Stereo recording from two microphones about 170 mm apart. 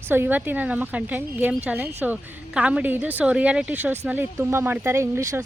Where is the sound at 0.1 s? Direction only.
10° right (ahead or behind).